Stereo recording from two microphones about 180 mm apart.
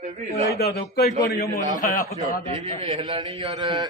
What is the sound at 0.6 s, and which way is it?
Speech, 65° left (ahead or behind).